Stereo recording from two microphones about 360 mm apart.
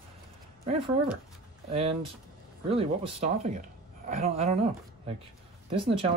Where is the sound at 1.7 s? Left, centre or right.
Centre.